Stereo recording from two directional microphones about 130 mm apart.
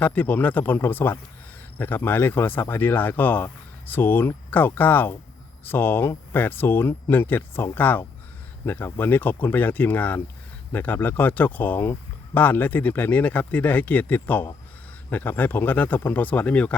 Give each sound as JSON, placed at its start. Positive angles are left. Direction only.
{"t": 0.0, "sound": "speech", "side_deg": 10}